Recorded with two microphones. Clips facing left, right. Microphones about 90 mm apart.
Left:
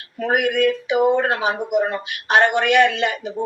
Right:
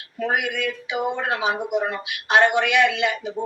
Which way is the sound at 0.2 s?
50° left (ahead or behind).